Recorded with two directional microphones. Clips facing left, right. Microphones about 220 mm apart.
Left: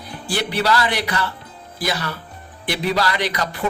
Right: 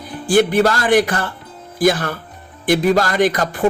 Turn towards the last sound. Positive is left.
turn(degrees=-45)  # may be behind; listen again after turning